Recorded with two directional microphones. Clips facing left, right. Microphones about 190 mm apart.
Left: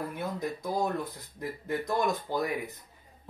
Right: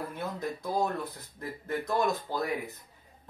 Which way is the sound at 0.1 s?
15° left (ahead or behind).